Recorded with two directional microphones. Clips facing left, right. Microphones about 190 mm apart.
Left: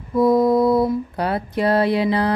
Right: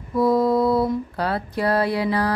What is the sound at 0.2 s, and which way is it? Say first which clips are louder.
Mantra: left 3 dB; 20° left (ahead or behind).